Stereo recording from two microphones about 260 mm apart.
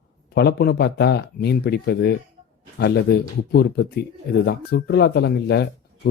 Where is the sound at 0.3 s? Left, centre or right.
Left.